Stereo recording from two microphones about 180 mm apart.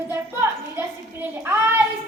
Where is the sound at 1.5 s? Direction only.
10° right (ahead or behind).